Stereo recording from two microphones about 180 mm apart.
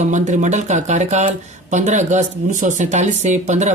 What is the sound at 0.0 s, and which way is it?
Speech, 40° right (ahead or behind).